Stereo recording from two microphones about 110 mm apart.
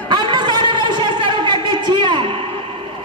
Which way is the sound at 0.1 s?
45° right (ahead or behind).